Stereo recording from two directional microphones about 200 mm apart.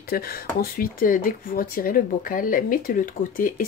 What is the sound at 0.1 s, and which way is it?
Speech, 50° left (ahead or behind).